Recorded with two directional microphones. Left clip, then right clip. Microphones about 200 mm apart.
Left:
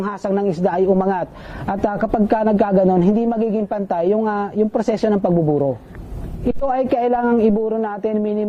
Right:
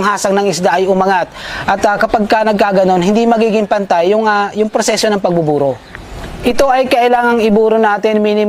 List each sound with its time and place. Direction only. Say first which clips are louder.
0.0 s a man's voice: right 9 dB; 15° right (ahead or behind)
5.5 s speech: right 5 dB; 30° right (ahead or behind)
6.4 s a man's voice: right 9 dB; 10° right (ahead or behind)